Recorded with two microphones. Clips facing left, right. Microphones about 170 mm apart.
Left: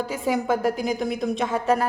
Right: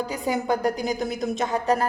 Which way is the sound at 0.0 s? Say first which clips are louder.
Left 1 dB; centre (ahead or behind).